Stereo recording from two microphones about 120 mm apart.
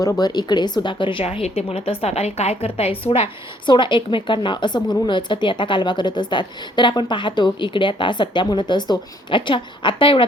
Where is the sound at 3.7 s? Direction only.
40° left (ahead or behind).